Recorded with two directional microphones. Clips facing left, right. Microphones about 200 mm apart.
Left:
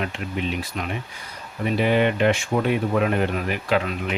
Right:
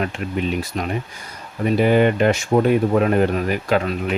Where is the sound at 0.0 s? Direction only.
45° right (ahead or behind).